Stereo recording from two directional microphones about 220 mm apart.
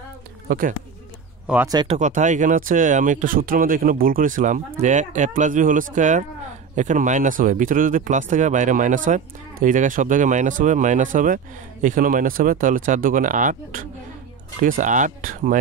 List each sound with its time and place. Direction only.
0.5 s speech: 40° right (ahead or behind)
1.5 s speech: 10° right (ahead or behind)
1.8 s speech: 30° right (ahead or behind)